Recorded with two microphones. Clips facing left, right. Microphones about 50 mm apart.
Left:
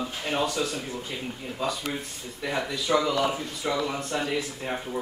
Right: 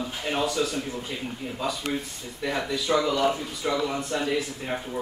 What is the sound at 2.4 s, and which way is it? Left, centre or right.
A man's voice, centre.